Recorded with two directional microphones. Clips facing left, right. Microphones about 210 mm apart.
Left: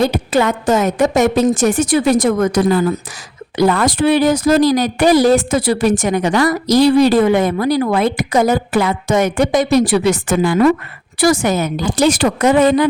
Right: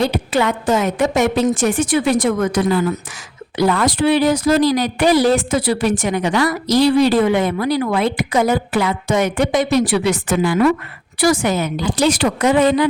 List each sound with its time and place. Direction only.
0.0 s speech: 45° left (ahead or behind)